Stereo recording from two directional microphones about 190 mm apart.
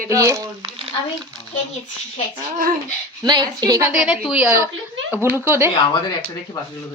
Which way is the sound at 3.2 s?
20° right (ahead or behind).